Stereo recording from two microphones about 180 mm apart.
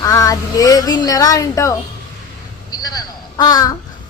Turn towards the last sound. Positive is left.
turn(degrees=20)  # may be behind; listen again after turning